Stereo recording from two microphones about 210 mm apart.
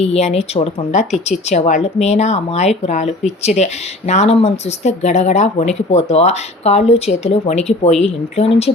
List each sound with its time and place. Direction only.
0.0 s speech: 30° left (ahead or behind)